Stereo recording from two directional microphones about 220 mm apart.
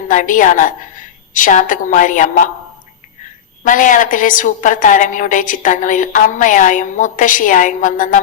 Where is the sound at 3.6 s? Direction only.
35° left (ahead or behind).